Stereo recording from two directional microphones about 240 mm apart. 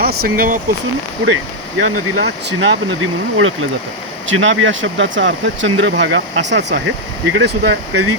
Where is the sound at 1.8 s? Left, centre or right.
Right.